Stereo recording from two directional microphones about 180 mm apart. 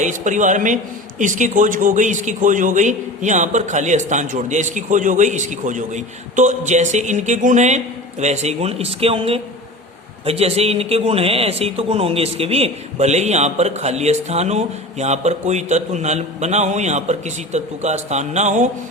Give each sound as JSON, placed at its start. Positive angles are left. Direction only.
{"t": 0.0, "sound": "a man's voice", "side_deg": -45}